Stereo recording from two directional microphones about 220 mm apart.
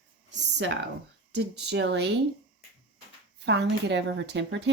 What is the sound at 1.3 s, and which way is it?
Speech, 50° right (ahead or behind).